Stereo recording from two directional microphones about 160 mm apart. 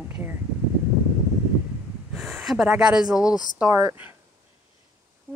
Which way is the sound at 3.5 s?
15° right (ahead or behind).